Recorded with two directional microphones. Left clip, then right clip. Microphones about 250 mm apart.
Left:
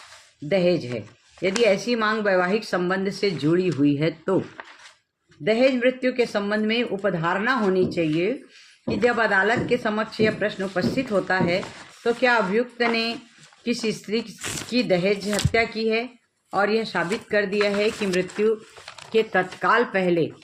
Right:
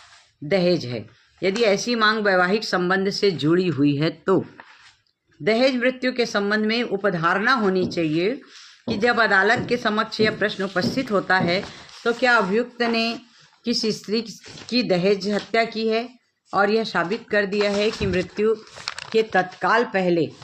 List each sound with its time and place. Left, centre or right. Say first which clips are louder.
0.4 s speech: right 1 dB; right
5.5 s speech: even; right